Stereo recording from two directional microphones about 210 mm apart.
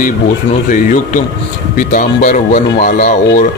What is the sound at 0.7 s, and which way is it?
Speech, 40° left (ahead or behind).